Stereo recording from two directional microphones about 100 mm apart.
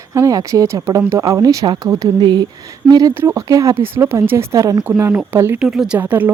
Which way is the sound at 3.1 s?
25° right (ahead or behind).